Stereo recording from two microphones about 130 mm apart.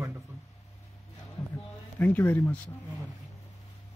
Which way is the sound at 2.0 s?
15° left (ahead or behind).